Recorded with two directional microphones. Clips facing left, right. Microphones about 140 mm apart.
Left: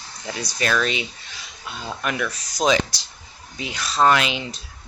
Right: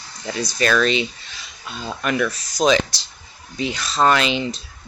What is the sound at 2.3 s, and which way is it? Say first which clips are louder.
Speech: even; 15° left (ahead or behind).